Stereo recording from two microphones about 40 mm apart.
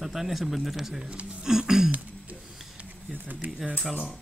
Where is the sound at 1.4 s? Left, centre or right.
Centre.